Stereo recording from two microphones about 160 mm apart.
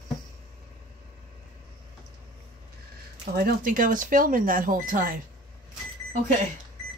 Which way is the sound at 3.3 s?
65° right (ahead or behind).